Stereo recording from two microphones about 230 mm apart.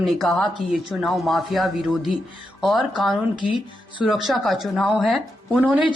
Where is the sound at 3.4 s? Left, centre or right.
Left.